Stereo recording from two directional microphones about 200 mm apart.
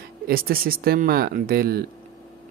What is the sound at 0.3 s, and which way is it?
Speech, 45° right (ahead or behind).